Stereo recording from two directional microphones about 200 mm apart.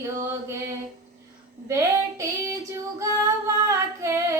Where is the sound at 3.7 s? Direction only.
15° right (ahead or behind).